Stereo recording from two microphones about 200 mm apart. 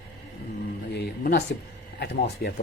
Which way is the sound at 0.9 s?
55° left (ahead or behind).